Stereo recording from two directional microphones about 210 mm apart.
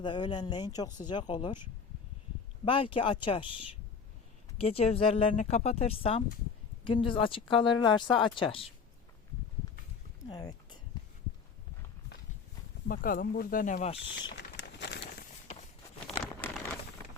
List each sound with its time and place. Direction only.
0.0 s speech: 20° left (ahead or behind)
2.6 s speech: 25° left (ahead or behind)
10.2 s speech: 20° left (ahead or behind)
12.9 s speech: 40° left (ahead or behind); by 14.3 s 25° left (ahead or behind)
14.3 s a sound: 55° left (ahead or behind)
16.4 s a sound: 5° left (ahead or behind)